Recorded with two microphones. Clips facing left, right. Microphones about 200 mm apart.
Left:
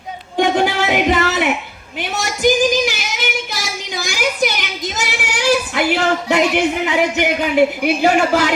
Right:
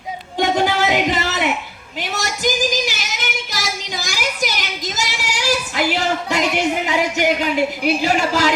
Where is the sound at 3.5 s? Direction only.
55° left (ahead or behind).